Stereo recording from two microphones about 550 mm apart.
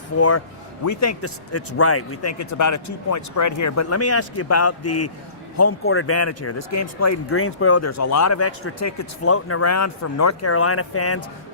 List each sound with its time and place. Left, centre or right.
0.2 s speech: left